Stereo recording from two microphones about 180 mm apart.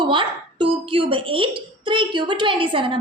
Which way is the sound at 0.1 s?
30° right (ahead or behind).